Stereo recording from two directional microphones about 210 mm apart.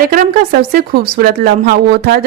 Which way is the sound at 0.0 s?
45° right (ahead or behind).